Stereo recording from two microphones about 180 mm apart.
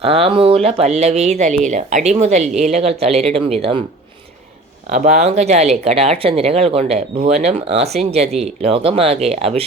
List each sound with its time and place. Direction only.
0.0 s speech: 35° right (ahead or behind)
4.9 s speech: 45° right (ahead or behind)